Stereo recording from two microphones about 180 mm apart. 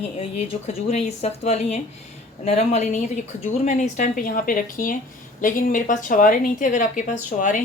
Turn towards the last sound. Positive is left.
turn(degrees=45)  # may be behind; listen again after turning